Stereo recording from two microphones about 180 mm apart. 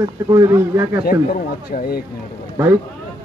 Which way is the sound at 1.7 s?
55° left (ahead or behind).